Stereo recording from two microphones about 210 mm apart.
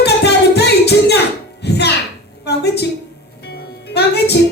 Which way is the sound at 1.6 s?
50° left (ahead or behind).